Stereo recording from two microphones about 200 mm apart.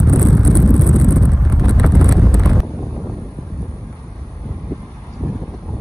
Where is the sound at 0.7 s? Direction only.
Centre (ahead or behind).